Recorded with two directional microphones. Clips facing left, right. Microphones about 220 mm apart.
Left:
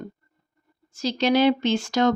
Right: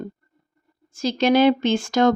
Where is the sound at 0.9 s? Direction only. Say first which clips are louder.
Right 3 dB; 50° right (ahead or behind).